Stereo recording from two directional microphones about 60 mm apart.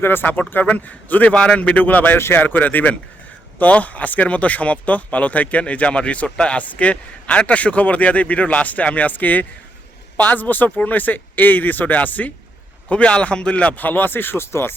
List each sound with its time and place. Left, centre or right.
0.0 s speech: left
2.1 s speech: left
2.4 s speech: left